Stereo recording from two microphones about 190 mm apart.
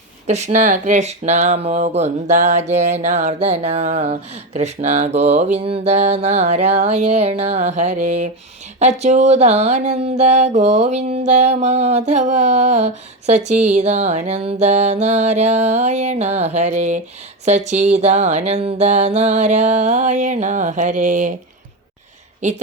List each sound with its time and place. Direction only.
0.3 s music: 35° right (ahead or behind)
22.4 s speech: 40° right (ahead or behind)